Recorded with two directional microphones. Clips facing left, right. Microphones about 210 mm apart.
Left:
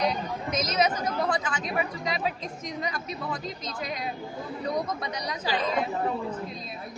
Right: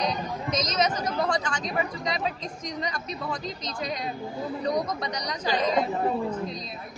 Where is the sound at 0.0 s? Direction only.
5° left (ahead or behind).